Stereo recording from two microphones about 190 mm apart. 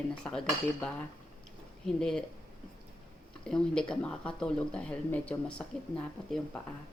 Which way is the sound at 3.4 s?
5° left (ahead or behind).